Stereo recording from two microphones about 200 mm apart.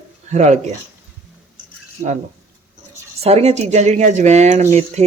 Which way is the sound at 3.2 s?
35° right (ahead or behind).